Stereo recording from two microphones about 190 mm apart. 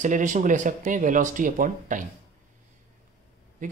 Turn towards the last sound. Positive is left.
turn(degrees=-45)  # may be behind; listen again after turning